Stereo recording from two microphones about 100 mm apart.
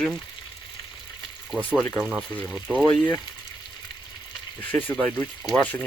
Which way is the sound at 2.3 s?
15° left (ahead or behind).